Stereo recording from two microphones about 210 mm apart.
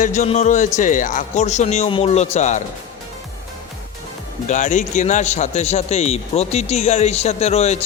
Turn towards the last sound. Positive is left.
turn(degrees=30)  # may be behind; listen again after turning